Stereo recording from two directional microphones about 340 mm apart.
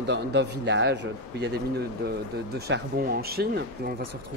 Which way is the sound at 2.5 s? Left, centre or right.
Right.